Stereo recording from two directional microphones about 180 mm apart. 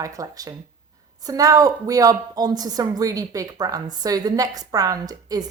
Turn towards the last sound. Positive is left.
turn(degrees=-20)  # may be behind; listen again after turning